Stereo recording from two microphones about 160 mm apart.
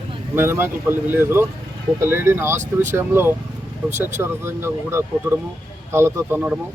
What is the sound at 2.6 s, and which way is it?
Speech, 50° right (ahead or behind).